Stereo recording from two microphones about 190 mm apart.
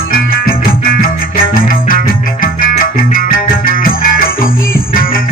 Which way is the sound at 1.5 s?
50° left (ahead or behind).